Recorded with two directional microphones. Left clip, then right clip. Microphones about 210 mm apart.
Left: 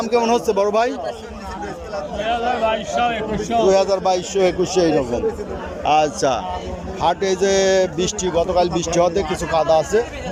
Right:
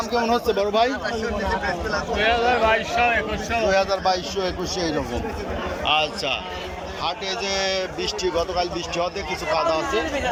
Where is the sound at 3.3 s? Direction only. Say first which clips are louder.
Left 5 dB; 25° left (ahead or behind).